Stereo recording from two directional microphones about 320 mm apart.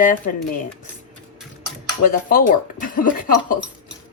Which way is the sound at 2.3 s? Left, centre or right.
Left.